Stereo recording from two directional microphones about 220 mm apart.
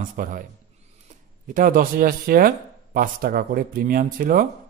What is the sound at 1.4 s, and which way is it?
Speech, 35° right (ahead or behind).